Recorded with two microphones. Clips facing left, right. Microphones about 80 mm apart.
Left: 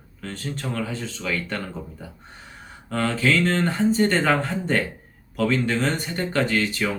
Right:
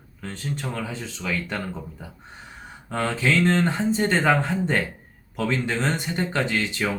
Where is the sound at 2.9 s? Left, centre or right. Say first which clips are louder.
Left 1 dB; right.